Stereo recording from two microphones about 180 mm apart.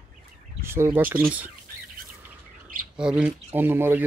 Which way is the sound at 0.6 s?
15° right (ahead or behind).